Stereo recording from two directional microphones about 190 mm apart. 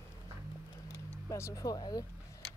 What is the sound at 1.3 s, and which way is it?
Speech, 15° left (ahead or behind).